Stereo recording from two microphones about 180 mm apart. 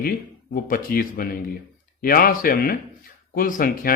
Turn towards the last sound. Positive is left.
turn(degrees=50)  # may be behind; listen again after turning